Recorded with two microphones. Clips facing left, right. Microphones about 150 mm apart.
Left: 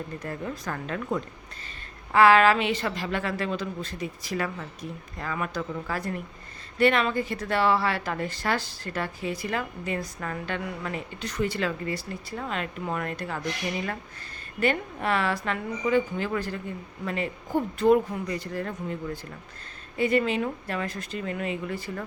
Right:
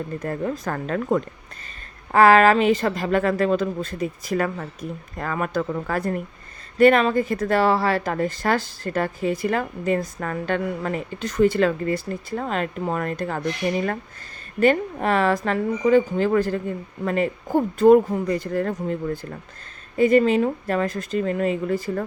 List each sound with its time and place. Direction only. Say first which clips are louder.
0.2 s speech: right 7 dB; 50° right (ahead or behind)
14.6 s speech: right 7 dB; 40° right (ahead or behind)